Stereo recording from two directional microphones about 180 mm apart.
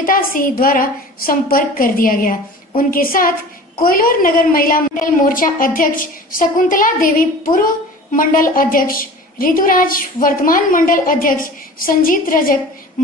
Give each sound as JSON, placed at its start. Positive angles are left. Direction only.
{"t": 0.0, "sound": "a woman's voice", "side_deg": 50}